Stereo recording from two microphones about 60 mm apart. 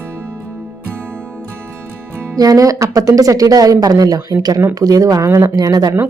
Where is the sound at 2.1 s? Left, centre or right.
Right.